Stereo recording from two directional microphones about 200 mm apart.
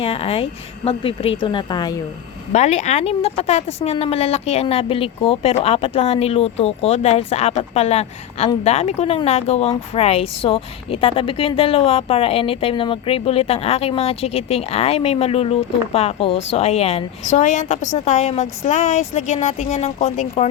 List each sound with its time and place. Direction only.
0.0 s a woman's voice: 30° left (ahead or behind)
2.5 s speech: 35° left (ahead or behind)